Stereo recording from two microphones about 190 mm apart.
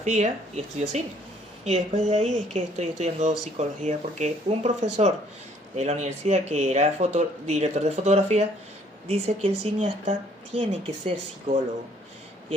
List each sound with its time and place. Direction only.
0.0 s speech: 35° right (ahead or behind)